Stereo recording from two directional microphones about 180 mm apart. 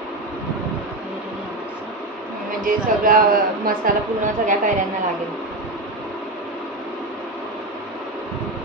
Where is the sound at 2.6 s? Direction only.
50° right (ahead or behind).